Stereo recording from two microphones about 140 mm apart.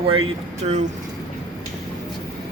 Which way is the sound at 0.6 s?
55° right (ahead or behind).